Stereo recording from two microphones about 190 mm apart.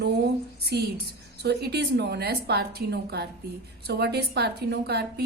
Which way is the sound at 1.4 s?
60° right (ahead or behind).